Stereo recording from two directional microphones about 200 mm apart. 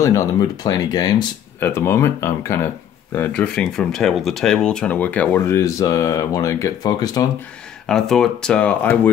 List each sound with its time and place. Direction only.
0.0 s speech: 15° left (ahead or behind)
7.9 s speech: centre (ahead or behind)